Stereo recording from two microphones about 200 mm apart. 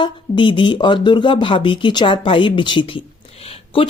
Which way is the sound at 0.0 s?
25° left (ahead or behind).